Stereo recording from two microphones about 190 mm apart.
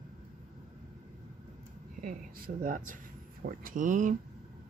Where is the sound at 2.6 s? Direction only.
45° right (ahead or behind).